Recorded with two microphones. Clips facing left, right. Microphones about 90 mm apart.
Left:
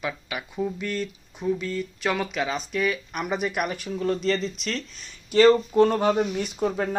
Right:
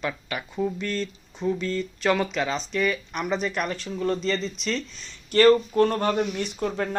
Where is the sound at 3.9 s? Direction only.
Centre (ahead or behind).